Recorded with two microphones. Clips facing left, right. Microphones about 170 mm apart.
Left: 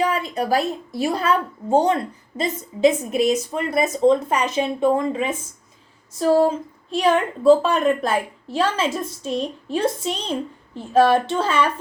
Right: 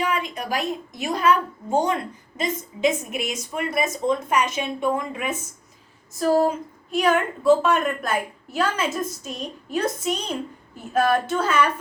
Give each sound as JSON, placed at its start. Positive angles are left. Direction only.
{"t": 0.0, "sound": "a woman's voice", "side_deg": 35}